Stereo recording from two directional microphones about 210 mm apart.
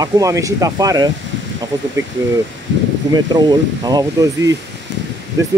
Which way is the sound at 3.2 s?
20° right (ahead or behind).